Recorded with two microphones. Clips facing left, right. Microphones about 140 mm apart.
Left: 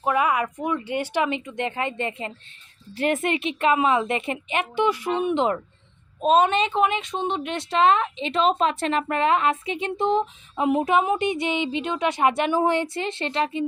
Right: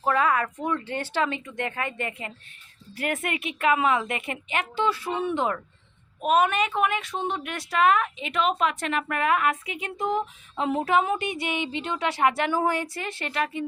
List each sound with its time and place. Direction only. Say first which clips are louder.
0.0 s a woman's voice: left 1 dB; 15° left (ahead or behind)